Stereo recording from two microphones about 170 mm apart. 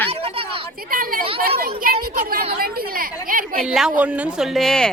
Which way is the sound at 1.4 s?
60° right (ahead or behind).